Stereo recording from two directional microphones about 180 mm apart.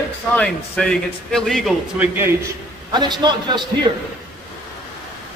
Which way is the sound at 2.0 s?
15° right (ahead or behind).